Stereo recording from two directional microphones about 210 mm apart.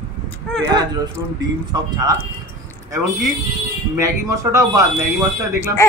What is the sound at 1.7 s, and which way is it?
Speech, 20° right (ahead or behind).